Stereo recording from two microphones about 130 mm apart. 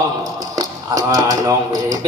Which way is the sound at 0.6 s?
25° right (ahead or behind).